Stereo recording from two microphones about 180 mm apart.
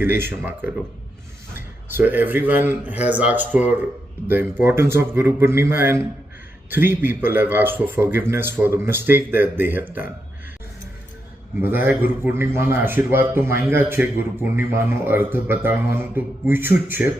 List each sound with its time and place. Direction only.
0.0 s speech: 10° right (ahead or behind)
11.6 s speech: 10° right (ahead or behind)